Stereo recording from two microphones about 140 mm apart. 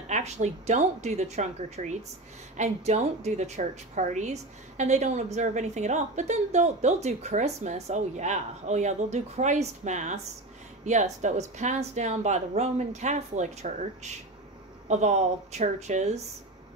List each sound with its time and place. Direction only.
0.1 s a woman's voice: 55° right (ahead or behind)